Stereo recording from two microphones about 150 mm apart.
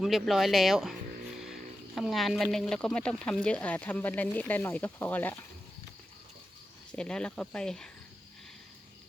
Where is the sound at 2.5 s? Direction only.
5° left (ahead or behind).